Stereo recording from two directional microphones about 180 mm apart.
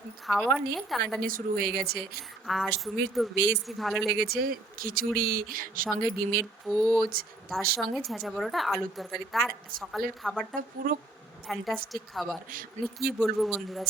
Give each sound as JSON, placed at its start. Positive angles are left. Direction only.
{"t": 0.3, "sound": "a woman's voice", "side_deg": 0}
{"t": 1.2, "sound": "speech", "side_deg": -55}
{"t": 2.5, "sound": "a woman's voice", "side_deg": 0}
{"t": 3.3, "sound": "speech", "side_deg": -90}
{"t": 3.7, "sound": "a woman's voice", "side_deg": 0}
{"t": 4.2, "sound": "speech", "side_deg": -55}
{"t": 6.7, "sound": "a woman's voice", "side_deg": 5}
{"t": 11.4, "sound": "a woman's voice", "side_deg": 0}
{"t": 12.5, "sound": "speech", "side_deg": -55}
{"t": 13.1, "sound": "a woman's voice", "side_deg": 0}